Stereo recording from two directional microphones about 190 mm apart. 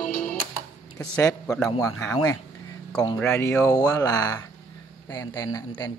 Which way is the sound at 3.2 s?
10° left (ahead or behind).